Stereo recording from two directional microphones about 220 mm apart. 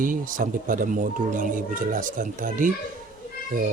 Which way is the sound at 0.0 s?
40° right (ahead or behind).